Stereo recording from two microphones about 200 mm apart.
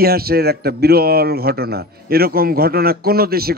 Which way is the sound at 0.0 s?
50° right (ahead or behind).